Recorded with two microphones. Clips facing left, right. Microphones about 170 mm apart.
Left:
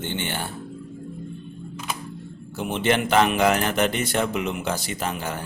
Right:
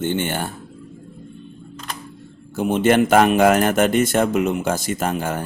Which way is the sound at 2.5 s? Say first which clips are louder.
Right 7 dB; 45° right (ahead or behind).